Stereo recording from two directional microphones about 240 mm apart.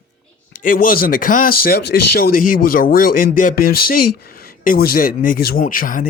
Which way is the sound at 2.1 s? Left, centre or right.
Left.